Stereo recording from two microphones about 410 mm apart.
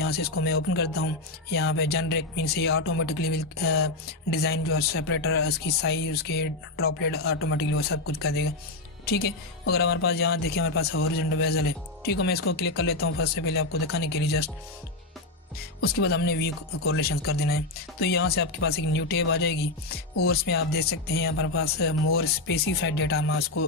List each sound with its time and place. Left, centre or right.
0.0 s speech: left
15.8 s speech: left